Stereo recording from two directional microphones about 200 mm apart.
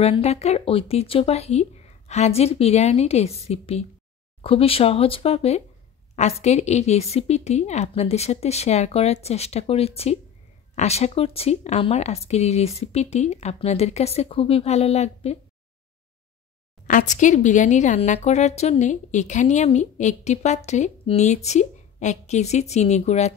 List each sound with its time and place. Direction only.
0.0 s speech: 30° left (ahead or behind)
16.8 s speech: 40° left (ahead or behind)